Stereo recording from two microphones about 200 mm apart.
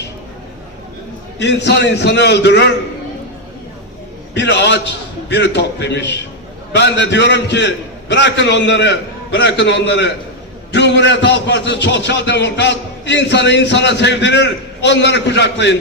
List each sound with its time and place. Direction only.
1.4 s a man's voice: 60° left (ahead or behind)
4.4 s a man's voice: 60° left (ahead or behind)